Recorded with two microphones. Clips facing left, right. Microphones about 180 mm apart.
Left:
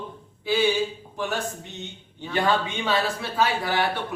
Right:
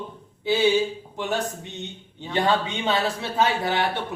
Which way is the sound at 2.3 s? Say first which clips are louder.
Right 1 dB; 20° right (ahead or behind).